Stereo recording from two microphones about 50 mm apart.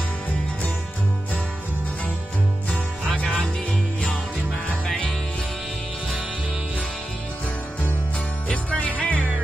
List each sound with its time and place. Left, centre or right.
8.5 s jingle bell: left